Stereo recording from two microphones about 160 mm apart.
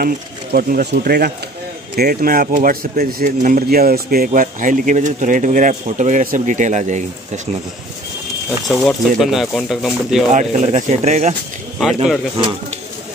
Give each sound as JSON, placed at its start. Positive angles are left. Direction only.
{"t": 0.0, "sound": "speech", "side_deg": -65}
{"t": 4.3, "sound": "speech", "side_deg": -55}
{"t": 8.6, "sound": "speech", "side_deg": 0}
{"t": 10.3, "sound": "speech", "side_deg": -50}